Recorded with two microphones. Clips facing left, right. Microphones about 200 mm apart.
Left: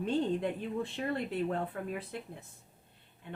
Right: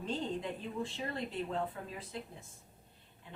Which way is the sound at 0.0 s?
60° left (ahead or behind).